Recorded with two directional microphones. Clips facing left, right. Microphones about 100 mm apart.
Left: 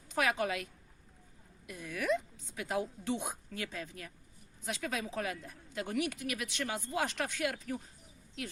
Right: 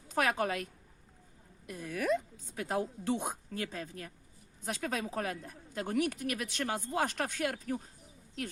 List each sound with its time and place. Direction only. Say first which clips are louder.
0.1 s a woman's voice: right 1 dB; 40° right (ahead or behind)